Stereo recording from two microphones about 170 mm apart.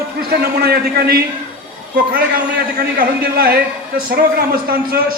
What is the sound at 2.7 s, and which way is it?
A man's voice, 60° right (ahead or behind).